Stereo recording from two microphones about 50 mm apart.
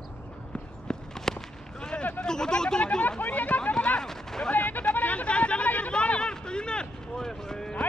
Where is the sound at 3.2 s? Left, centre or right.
Left; by 4.5 s centre.